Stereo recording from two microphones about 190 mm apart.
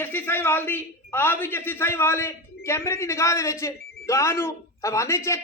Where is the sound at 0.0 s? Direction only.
10° left (ahead or behind).